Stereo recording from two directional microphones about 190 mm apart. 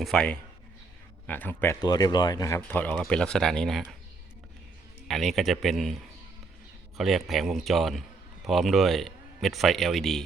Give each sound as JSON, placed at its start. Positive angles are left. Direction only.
{"t": 0.0, "sound": "speech", "side_deg": 5}
{"t": 1.6, "sound": "speech", "side_deg": 20}
{"t": 2.6, "sound": "speech", "side_deg": 10}
{"t": 5.0, "sound": "speech", "side_deg": 0}